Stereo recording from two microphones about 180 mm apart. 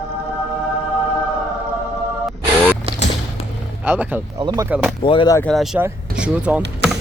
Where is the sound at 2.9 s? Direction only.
35° right (ahead or behind).